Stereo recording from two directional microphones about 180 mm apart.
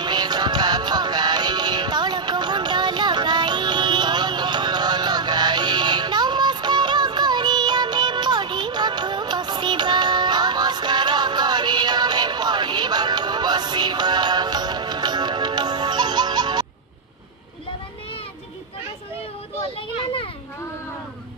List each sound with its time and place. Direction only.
0.0 s music: 25° right (ahead or behind)